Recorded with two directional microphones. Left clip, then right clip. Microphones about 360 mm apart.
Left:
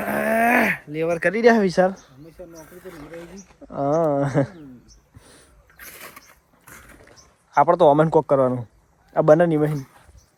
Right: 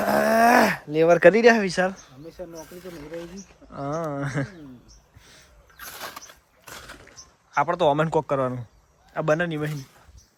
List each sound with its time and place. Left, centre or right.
0.0 s groan: centre
1.4 s speech: centre
2.3 s speech: right
3.2 s speech: centre
5.2 s a sound: centre
5.7 s a sound: centre
7.5 s speech: centre